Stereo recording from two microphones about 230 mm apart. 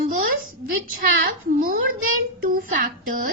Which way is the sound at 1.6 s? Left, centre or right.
Right.